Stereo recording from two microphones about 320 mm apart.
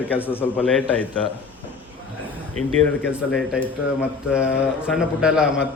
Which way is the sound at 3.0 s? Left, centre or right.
Centre.